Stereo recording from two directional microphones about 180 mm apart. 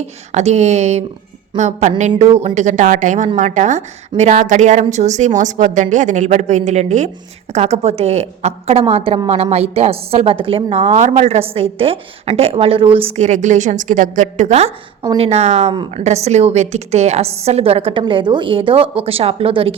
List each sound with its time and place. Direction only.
0.3 s a woman's voice: 40° right (ahead or behind)
15.0 s a woman's voice: 30° right (ahead or behind)
15.7 s speech: 25° right (ahead or behind)
16.0 s a woman's voice: 40° right (ahead or behind)